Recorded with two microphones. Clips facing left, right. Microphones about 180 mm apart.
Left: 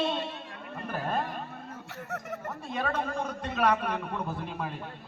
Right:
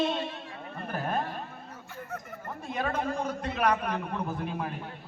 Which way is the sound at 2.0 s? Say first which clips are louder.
Left 5 dB; 75° left (ahead or behind).